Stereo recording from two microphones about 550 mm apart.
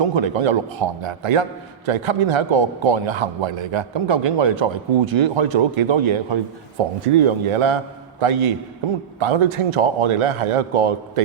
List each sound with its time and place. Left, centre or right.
0.0 s a man's voice: right
1.9 s a man's voice: right